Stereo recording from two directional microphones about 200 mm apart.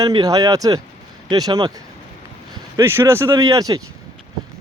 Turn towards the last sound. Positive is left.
turn(degrees=-15)  # may be behind; listen again after turning